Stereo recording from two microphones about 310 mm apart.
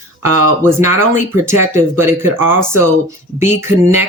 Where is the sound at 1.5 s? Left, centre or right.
Centre.